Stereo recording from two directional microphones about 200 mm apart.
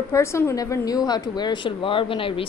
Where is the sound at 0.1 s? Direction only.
15° left (ahead or behind).